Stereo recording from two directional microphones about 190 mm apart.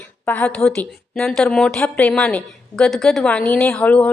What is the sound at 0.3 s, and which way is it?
A woman's voice, 10° left (ahead or behind).